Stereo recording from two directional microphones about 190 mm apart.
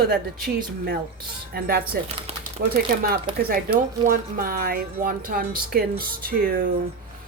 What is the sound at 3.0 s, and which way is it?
A woman's voice, 50° right (ahead or behind).